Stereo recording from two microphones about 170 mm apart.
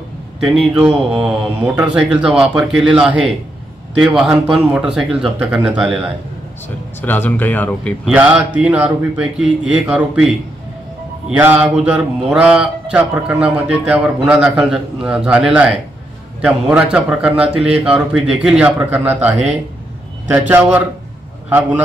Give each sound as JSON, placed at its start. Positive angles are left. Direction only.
{"t": 0.4, "sound": "speech", "side_deg": 0}
{"t": 7.0, "sound": "speech", "side_deg": 10}
{"t": 8.1, "sound": "speech", "side_deg": -5}
{"t": 17.6, "sound": "a man's voice", "side_deg": -35}
{"t": 18.3, "sound": "speech", "side_deg": -5}
{"t": 20.4, "sound": "speech", "side_deg": -10}